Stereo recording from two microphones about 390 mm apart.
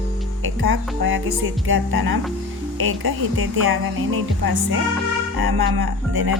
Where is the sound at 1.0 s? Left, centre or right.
Right.